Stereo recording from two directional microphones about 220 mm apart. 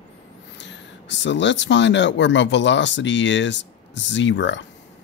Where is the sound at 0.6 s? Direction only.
55° left (ahead or behind).